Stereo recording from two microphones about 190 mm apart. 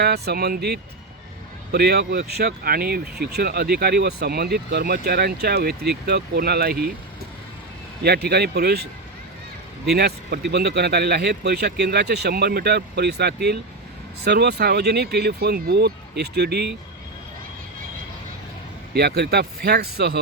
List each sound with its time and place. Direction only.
0.0 s speech: 55° right (ahead or behind)
8.0 s speech: 60° right (ahead or behind)
9.9 s speech: 60° right (ahead or behind)
18.9 s speech: 60° right (ahead or behind)